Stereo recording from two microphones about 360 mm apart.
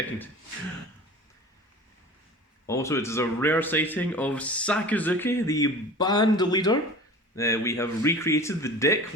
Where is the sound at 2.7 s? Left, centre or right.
Centre.